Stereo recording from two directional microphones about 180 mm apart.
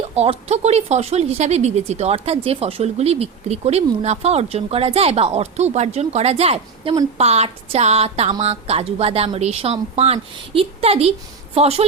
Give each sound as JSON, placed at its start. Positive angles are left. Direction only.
{"t": 0.2, "sound": "speech", "side_deg": -35}